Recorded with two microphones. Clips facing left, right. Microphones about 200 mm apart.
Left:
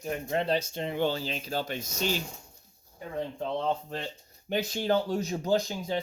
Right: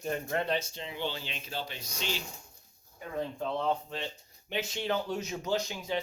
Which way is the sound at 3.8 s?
45° left (ahead or behind).